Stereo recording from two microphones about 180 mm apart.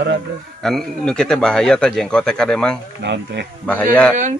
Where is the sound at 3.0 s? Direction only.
70° right (ahead or behind).